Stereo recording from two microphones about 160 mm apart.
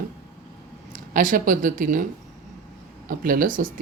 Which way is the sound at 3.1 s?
60° right (ahead or behind).